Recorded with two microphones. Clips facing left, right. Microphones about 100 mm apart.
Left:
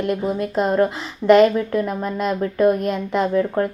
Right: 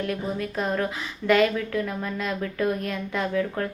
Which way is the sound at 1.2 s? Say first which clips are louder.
Left 8 dB; 25° left (ahead or behind).